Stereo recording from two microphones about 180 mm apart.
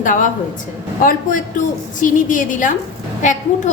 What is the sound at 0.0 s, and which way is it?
Speech, 45° left (ahead or behind).